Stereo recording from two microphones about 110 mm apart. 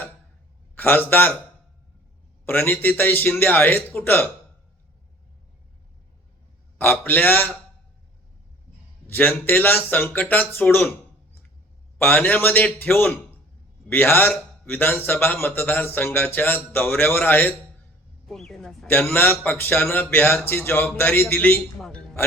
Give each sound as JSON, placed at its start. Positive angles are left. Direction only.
{"t": 0.8, "sound": "a man's voice", "side_deg": 15}
{"t": 2.5, "sound": "a man's voice", "side_deg": 15}
{"t": 6.7, "sound": "a man's voice", "side_deg": 15}
{"t": 9.0, "sound": "a man's voice", "side_deg": 15}
{"t": 11.9, "sound": "a man's voice", "side_deg": 15}
{"t": 18.3, "sound": "a sound", "side_deg": 0}
{"t": 18.9, "sound": "a man's voice", "side_deg": 15}
{"t": 21.8, "sound": "a sound", "side_deg": 5}